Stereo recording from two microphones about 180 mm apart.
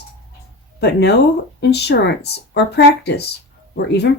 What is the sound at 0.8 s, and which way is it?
Speech, 70° left (ahead or behind).